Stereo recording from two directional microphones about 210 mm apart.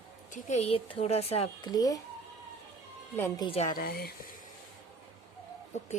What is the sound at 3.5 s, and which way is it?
Speech, 30° left (ahead or behind).